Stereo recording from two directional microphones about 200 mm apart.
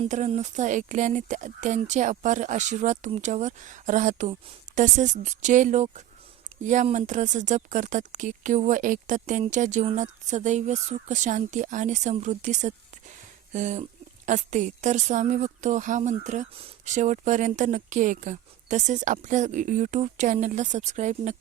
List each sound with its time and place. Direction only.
0.0 s a woman's voice: 35° right (ahead or behind)